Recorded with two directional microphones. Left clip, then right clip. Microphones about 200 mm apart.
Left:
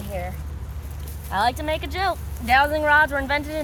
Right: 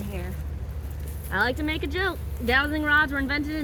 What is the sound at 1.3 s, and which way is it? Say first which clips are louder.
Speech: left 3 dB; 40° left (ahead or behind).